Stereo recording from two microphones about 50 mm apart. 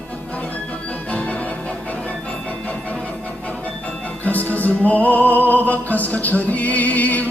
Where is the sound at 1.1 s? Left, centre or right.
Left.